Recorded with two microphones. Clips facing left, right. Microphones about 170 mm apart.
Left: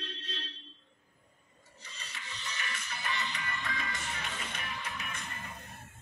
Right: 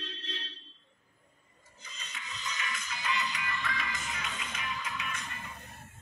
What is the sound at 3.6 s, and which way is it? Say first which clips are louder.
Music: right 2 dB; 20° left (ahead or behind).